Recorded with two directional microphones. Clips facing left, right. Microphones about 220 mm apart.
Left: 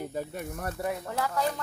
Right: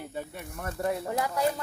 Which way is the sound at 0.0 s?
40° left (ahead or behind).